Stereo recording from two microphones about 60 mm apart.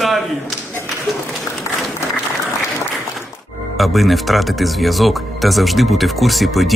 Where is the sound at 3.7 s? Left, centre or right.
Centre.